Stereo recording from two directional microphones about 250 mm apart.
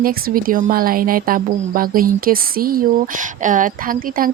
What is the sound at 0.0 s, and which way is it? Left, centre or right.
A woman's voice, right.